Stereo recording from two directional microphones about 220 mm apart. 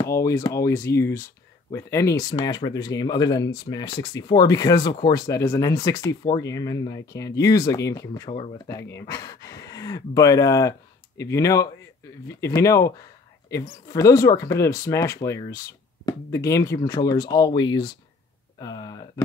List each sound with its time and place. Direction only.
0.0 s speech: 15° left (ahead or behind)